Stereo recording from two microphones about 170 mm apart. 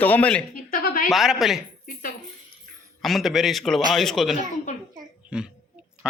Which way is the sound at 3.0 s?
Centre (ahead or behind).